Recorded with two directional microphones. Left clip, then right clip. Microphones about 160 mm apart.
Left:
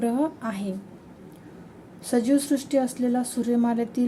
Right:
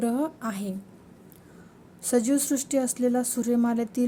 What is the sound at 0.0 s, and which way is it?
Speech, 35° right (ahead or behind).